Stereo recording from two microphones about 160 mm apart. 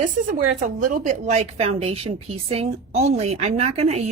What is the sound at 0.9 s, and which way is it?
A woman's voice, 50° right (ahead or behind).